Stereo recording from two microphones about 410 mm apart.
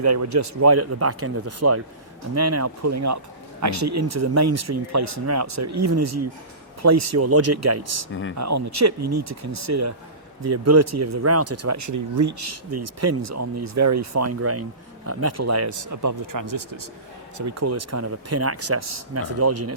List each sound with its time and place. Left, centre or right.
0.0 s speech: right
8.1 s speech: left
8.4 s speech: right
17.3 s speech: right